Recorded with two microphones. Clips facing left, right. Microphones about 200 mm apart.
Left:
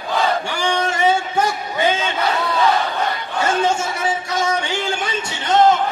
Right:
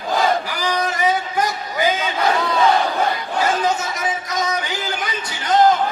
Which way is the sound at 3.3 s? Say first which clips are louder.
Left 2 dB; 30° left (ahead or behind).